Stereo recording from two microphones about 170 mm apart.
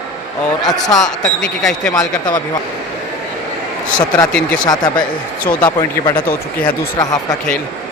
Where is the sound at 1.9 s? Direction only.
20° left (ahead or behind).